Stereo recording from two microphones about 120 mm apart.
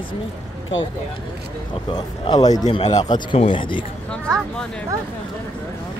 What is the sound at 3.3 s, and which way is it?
Speech, 45° left (ahead or behind).